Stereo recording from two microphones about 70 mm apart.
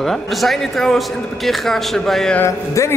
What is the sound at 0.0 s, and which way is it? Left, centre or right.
Speech, centre.